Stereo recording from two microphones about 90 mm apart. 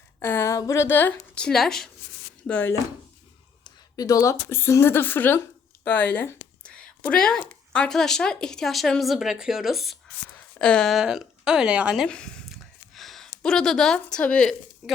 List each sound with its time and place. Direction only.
0.2 s a woman's voice: 25° left (ahead or behind)
1.5 s speech: 5° left (ahead or behind)
2.5 s speech: 15° left (ahead or behind)
3.6 s a woman's voice: 45° left (ahead or behind); by 10.9 s 5° left (ahead or behind)
10.9 s speech: 5° right (ahead or behind)
12.0 s speech: 10° left (ahead or behind)
12.5 s a sound: centre (ahead or behind)
13.4 s speech: 5° left (ahead or behind)
14.8 s speech: centre (ahead or behind)